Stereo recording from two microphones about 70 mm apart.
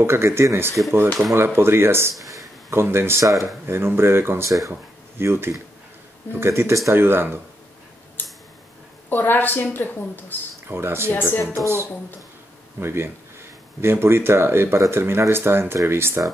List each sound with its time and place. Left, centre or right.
0.0 s speech: right
3.2 s speech: right
3.6 s speech: right
4.5 s speech: right
5.1 s speech: right
9.1 s a woman's voice: left
10.7 s speech: right